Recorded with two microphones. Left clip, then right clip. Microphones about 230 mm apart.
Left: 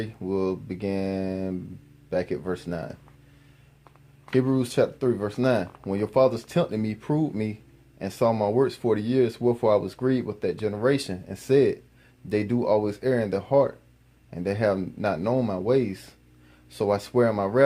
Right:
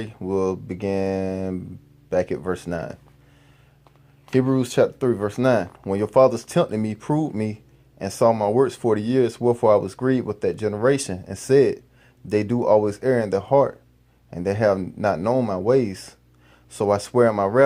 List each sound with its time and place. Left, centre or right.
0.0 s speech: right
4.4 s speech: right